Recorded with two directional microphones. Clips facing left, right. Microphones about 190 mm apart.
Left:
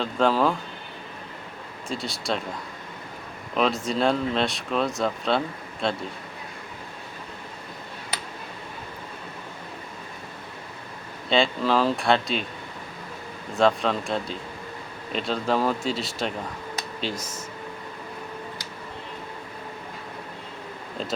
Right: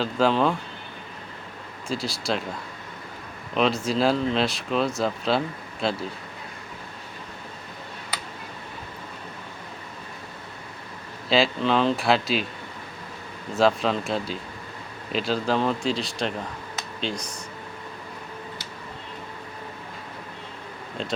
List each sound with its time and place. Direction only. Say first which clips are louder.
0.0 s speech: even; centre (ahead or behind)
1.9 s speech: right 1 dB; centre (ahead or behind)
3.5 s speech: right 1 dB; centre (ahead or behind)
11.3 s speech: right 1 dB; centre (ahead or behind)
13.5 s speech: even; centre (ahead or behind)
21.0 s speech: even; centre (ahead or behind)